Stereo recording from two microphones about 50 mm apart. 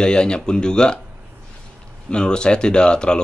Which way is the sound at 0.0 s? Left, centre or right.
Centre.